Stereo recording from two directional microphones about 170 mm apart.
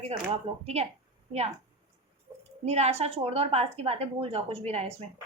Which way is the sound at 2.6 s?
40° right (ahead or behind).